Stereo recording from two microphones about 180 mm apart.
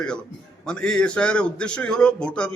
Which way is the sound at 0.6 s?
5° left (ahead or behind).